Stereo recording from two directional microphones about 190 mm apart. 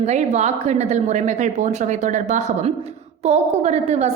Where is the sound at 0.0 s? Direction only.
35° right (ahead or behind).